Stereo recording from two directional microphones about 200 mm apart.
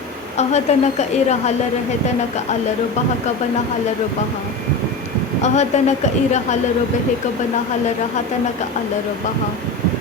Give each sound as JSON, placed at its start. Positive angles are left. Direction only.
{"t": 0.3, "sound": "speech", "side_deg": 35}
{"t": 5.4, "sound": "speech", "side_deg": 35}